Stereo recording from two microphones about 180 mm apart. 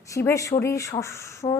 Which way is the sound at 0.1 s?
15° left (ahead or behind).